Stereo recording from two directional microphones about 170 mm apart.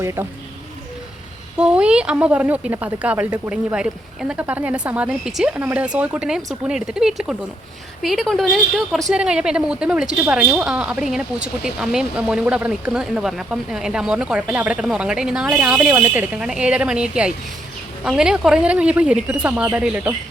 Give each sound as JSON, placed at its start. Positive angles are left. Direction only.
{"t": 0.0, "sound": "speech", "side_deg": -15}
{"t": 1.5, "sound": "a woman's voice", "side_deg": -5}